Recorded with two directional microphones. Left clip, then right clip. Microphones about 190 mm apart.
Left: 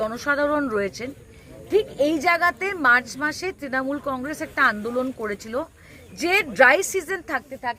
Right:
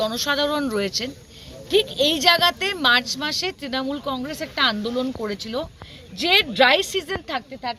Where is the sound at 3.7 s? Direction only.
15° left (ahead or behind).